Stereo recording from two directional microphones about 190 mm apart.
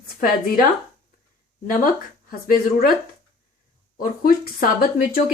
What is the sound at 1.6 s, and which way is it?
Speech, 50° left (ahead or behind).